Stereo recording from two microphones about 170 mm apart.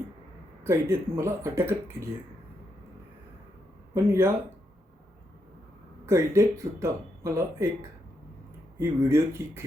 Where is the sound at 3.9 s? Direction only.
15° right (ahead or behind).